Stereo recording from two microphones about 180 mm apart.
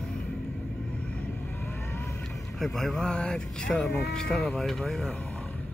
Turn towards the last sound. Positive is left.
turn(degrees=0)  # may be behind; listen again after turning